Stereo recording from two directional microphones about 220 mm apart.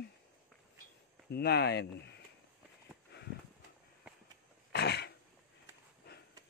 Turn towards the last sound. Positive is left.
turn(degrees=50)  # may be behind; listen again after turning